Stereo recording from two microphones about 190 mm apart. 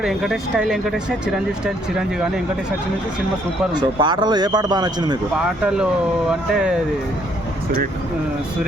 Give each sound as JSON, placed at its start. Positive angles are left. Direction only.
{"t": 0.0, "sound": "speech", "side_deg": 0}
{"t": 3.8, "sound": "a man's voice", "side_deg": -25}
{"t": 5.6, "sound": "speech", "side_deg": -5}